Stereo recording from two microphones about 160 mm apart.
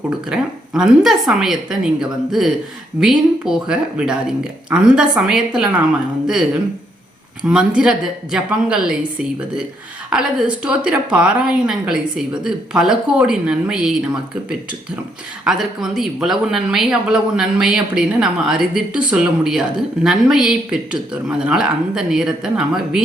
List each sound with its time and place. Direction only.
0.3 s a woman's voice: 5° right (ahead or behind)
15.4 s a woman's voice: 5° right (ahead or behind)